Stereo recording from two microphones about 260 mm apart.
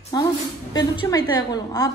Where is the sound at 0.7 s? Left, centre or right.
Centre.